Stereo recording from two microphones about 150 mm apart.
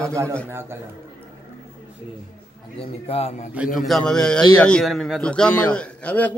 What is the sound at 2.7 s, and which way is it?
Speech, 40° left (ahead or behind).